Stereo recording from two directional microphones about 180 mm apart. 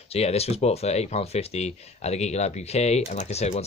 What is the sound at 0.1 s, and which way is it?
Speech, 35° left (ahead or behind).